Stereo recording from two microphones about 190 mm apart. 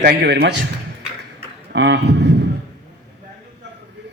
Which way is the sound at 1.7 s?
65° right (ahead or behind).